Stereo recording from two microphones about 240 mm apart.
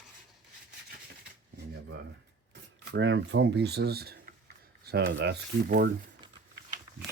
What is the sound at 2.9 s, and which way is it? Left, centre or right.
Speech, right.